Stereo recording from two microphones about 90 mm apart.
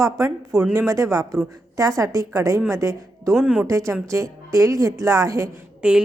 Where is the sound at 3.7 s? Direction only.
35° right (ahead or behind).